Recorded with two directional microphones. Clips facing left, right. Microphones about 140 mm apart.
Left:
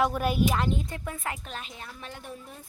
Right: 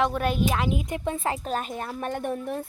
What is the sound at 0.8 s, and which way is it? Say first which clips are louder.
Speech: right 7 dB; 20° right (ahead or behind).